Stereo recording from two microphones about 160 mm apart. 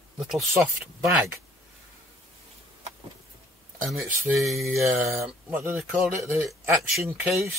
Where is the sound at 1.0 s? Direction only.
Centre (ahead or behind).